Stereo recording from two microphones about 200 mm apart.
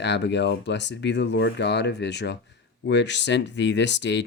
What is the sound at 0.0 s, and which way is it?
Speech, 60° left (ahead or behind).